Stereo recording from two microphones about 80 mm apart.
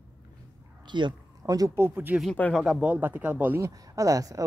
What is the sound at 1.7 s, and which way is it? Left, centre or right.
Speech, right.